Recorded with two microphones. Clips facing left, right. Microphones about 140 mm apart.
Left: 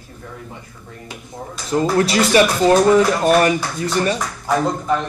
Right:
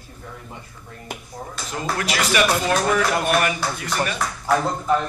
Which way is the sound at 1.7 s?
35° left (ahead or behind).